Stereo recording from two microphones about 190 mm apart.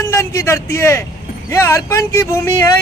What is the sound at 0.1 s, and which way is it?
Speech, 15° left (ahead or behind).